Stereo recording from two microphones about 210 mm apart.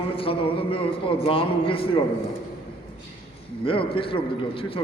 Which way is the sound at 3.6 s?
25° left (ahead or behind).